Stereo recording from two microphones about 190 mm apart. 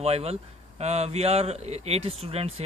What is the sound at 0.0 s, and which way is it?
Speech, 35° right (ahead or behind).